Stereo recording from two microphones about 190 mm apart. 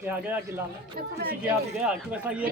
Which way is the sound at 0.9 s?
50° right (ahead or behind).